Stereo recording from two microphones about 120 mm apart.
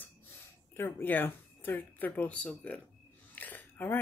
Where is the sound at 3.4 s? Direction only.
15° left (ahead or behind).